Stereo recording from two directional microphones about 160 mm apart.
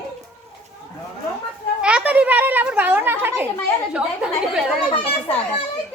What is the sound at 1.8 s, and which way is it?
A child's voice, 5° right (ahead or behind).